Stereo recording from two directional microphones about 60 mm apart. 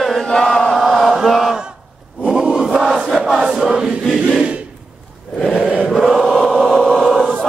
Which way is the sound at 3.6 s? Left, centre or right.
Centre.